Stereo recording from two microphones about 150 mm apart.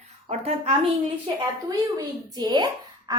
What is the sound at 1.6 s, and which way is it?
A woman's voice, 25° right (ahead or behind).